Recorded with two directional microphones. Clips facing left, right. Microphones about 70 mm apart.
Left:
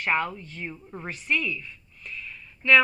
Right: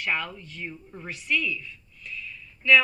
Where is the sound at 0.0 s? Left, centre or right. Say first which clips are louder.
Left 4 dB; left.